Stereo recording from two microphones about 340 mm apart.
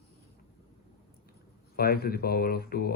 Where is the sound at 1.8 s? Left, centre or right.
Left.